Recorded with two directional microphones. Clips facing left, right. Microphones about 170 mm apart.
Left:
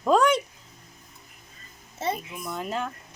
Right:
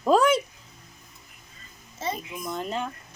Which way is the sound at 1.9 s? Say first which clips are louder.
Left 2 dB; 60° left (ahead or behind).